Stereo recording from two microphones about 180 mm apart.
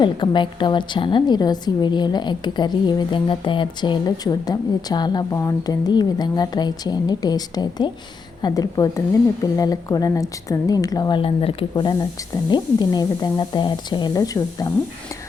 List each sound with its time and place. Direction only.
0.0 s a woman's voice: 25° left (ahead or behind)